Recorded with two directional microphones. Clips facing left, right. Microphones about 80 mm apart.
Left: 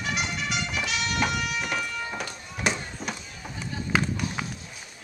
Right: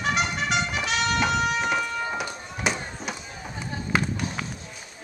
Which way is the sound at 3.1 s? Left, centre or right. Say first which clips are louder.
Right 2 dB; right.